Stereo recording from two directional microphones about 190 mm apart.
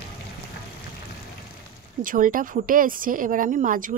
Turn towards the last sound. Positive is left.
turn(degrees=-45)  # may be behind; listen again after turning